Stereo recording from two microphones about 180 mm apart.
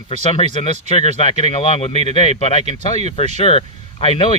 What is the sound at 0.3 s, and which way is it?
Speech, 30° left (ahead or behind).